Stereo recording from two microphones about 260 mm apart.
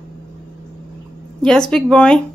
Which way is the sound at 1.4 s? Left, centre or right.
Centre.